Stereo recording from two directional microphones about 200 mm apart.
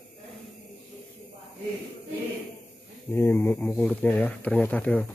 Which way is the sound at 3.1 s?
10° left (ahead or behind).